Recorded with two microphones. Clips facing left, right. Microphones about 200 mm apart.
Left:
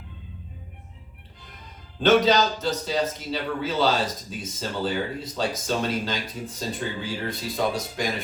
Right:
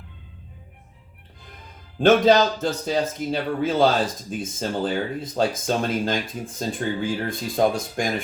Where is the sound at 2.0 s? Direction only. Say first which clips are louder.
Right 3 dB; 50° right (ahead or behind).